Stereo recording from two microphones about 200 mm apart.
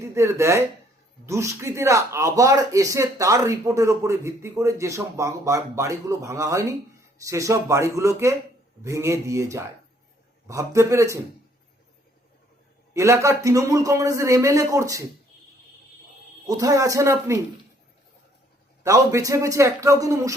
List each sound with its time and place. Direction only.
0.0 s speech: 15° right (ahead or behind)
12.9 s speech: 15° right (ahead or behind)
16.5 s speech: 15° right (ahead or behind)
18.8 s speech: 15° right (ahead or behind)